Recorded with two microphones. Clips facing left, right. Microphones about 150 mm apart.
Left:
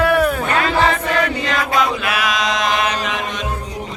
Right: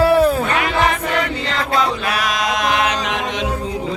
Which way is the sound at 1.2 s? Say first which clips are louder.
Left 2 dB; 30° right (ahead or behind).